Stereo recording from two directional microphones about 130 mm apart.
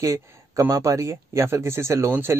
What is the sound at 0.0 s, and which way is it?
Speech, 25° right (ahead or behind).